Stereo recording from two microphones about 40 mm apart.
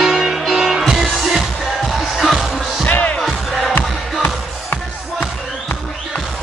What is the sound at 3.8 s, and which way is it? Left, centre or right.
Music, left.